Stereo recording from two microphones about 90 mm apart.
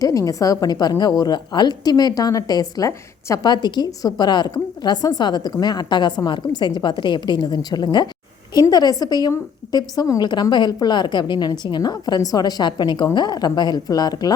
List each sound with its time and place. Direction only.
0.0 s a woman's voice: 35° left (ahead or behind)